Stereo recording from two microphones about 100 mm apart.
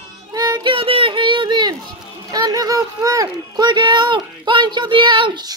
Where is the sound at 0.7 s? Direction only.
65° right (ahead or behind).